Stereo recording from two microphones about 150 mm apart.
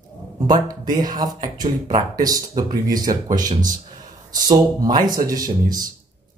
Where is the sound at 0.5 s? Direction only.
25° right (ahead or behind).